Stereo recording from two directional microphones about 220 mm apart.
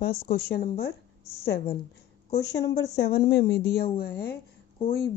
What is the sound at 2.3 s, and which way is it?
Speech, 50° left (ahead or behind).